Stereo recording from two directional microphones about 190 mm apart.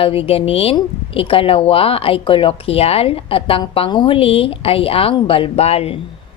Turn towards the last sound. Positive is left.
turn(degrees=30)  # may be behind; listen again after turning